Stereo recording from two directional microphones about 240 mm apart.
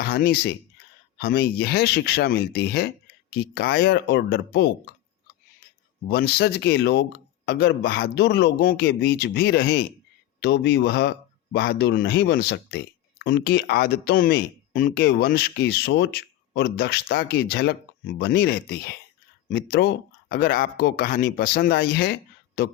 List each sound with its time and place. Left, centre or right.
0.0 s a man's voice: left
6.1 s a man's voice: left